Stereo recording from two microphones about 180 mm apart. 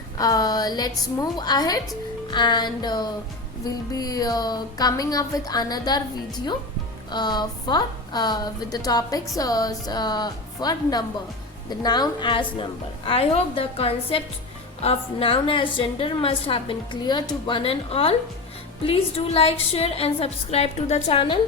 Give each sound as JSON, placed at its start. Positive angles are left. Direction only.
{"t": 0.2, "sound": "a woman's voice", "side_deg": 20}
{"t": 7.1, "sound": "a woman's voice", "side_deg": 25}